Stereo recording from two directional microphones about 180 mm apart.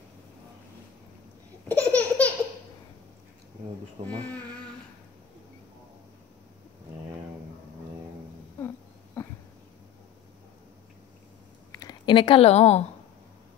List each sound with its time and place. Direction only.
1.7 s laughter: 10° left (ahead or behind)
4.1 s speech: 10° left (ahead or behind)
8.6 s a sound: 15° left (ahead or behind)
11.8 s a woman's voice: 25° left (ahead or behind)